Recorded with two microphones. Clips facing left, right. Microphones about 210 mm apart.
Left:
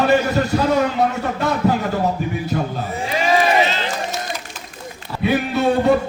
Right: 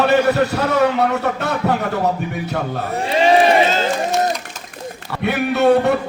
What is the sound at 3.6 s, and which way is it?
Run, 45° right (ahead or behind).